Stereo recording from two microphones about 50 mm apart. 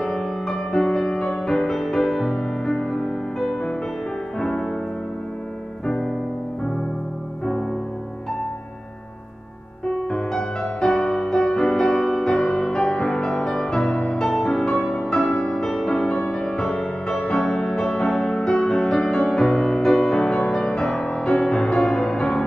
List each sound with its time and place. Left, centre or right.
0.0 s music: centre
10.0 s music: centre
14.1 s music: centre